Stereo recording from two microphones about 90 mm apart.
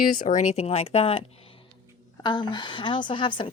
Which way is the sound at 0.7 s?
90° left.